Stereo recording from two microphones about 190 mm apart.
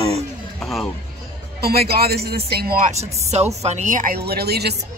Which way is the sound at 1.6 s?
55° right (ahead or behind).